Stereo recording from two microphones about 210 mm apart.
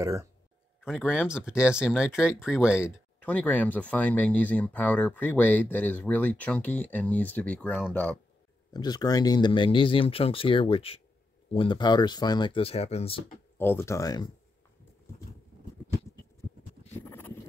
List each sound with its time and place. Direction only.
0.0 s speech: 15° right (ahead or behind)
0.8 s speech: 5° right (ahead or behind)
3.2 s speech: 5° left (ahead or behind)
8.7 s speech: 20° left (ahead or behind)
13.6 s speech: 10° left (ahead or behind)